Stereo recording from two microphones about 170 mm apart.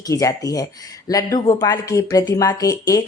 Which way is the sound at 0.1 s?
20° left (ahead or behind).